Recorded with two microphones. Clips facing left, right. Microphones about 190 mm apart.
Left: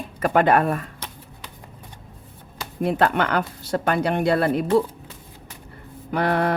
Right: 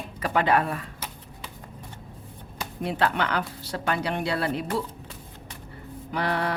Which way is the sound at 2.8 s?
50° left (ahead or behind).